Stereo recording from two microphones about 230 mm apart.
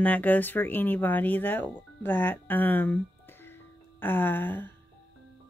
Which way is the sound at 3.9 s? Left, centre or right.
Centre.